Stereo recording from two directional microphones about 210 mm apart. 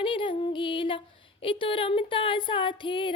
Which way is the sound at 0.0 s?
25° left (ahead or behind).